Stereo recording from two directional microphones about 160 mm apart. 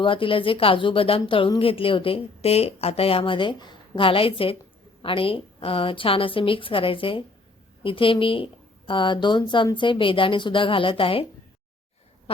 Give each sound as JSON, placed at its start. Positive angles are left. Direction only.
{"t": 0.0, "sound": "a woman's voice", "side_deg": 35}